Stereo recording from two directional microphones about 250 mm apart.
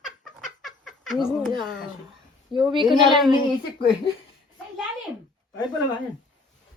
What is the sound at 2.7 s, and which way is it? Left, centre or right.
Speech, centre.